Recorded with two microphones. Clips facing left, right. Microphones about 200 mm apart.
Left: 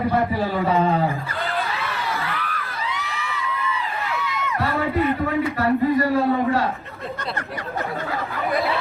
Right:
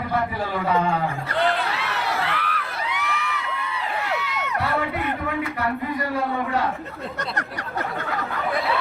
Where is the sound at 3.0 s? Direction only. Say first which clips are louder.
Right 1 dB; 60° right (ahead or behind).